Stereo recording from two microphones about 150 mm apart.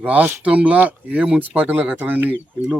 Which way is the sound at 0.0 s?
10° right (ahead or behind).